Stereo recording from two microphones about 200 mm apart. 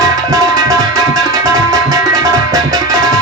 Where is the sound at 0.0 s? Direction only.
15° right (ahead or behind).